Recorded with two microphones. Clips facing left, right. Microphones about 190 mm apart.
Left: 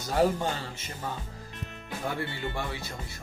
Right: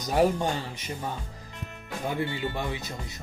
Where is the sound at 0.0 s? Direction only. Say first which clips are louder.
Right 2 dB; 15° right (ahead or behind).